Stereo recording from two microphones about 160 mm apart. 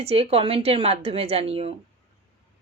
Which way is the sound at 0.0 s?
40° right (ahead or behind).